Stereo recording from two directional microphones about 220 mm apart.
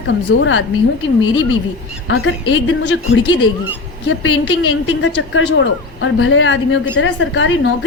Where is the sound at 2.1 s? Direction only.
55° left (ahead or behind).